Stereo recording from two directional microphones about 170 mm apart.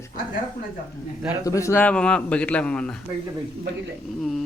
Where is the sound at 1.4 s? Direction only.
20° left (ahead or behind).